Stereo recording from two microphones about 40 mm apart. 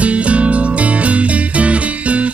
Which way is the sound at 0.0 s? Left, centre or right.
Right.